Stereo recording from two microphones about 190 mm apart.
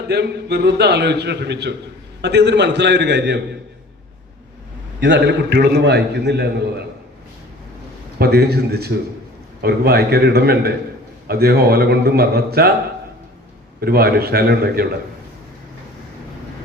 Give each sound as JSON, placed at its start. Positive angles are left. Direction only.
{"t": 0.1, "sound": "a man's voice", "side_deg": -60}
{"t": 4.9, "sound": "a man's voice", "side_deg": -70}
{"t": 8.2, "sound": "a man's voice", "side_deg": -55}
{"t": 13.8, "sound": "a man's voice", "side_deg": -55}